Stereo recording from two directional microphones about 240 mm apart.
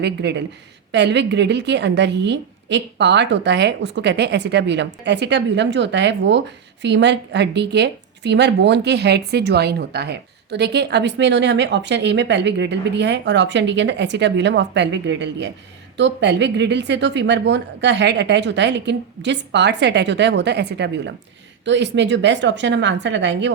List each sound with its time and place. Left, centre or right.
0.0 s speech: right